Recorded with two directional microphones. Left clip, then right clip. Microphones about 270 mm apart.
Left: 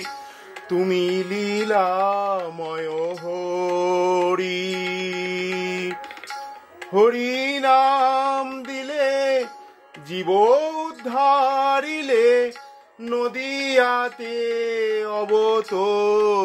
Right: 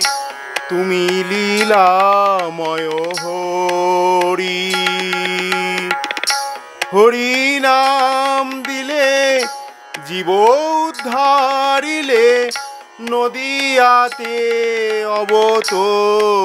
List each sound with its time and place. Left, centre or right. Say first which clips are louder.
1.1 s music: right 8 dB; right
2.9 s music: right 6 dB; right
3.3 s mantra: right 6 dB; centre
4.7 s music: right 9 dB; centre
5.8 s music: right 11 dB; right
6.9 s music: right 6 dB; right
10.1 s a sound: right 5 dB; centre
13.1 s music: right 7 dB; right
14.6 s mantra: right 6 dB; centre
15.3 s music: right 6 dB; centre
15.7 s mantra: right 6 dB; centre